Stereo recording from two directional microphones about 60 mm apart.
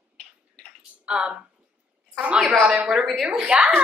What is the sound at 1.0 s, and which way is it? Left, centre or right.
Speech, centre.